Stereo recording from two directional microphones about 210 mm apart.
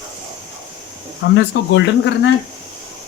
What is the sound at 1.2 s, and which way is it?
Speech, 55° left (ahead or behind).